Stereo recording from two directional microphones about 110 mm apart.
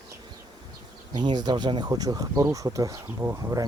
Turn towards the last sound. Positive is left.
turn(degrees=-35)  # may be behind; listen again after turning